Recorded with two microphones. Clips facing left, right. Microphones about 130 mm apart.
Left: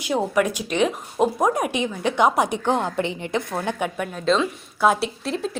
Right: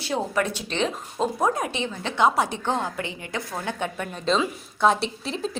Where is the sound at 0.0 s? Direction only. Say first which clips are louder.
Left 4 dB; 15° left (ahead or behind).